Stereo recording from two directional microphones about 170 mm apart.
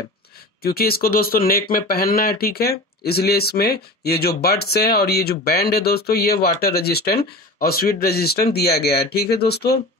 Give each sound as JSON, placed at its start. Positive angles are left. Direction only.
{"t": 0.6, "sound": "speech", "side_deg": 65}